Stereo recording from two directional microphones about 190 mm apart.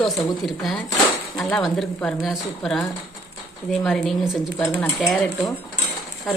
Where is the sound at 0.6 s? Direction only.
Centre (ahead or behind).